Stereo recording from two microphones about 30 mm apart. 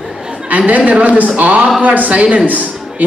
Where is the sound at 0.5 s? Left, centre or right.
Right.